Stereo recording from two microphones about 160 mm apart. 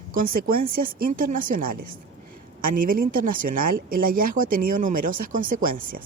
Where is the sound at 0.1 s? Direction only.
60° right (ahead or behind).